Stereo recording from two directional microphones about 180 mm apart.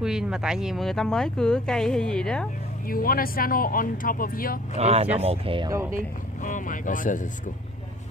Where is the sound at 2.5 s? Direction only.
50° left (ahead or behind).